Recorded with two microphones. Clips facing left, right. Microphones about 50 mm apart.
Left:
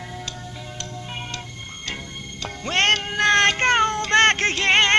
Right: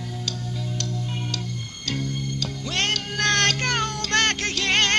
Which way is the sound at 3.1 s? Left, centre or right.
Left.